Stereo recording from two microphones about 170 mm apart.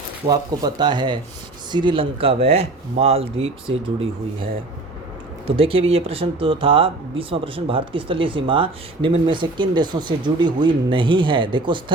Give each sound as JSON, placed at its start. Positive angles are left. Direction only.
{"t": 0.3, "sound": "speech", "side_deg": -25}
{"t": 5.5, "sound": "speech", "side_deg": -35}